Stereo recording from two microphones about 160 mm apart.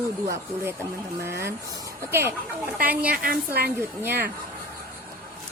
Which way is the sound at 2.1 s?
15° right (ahead or behind).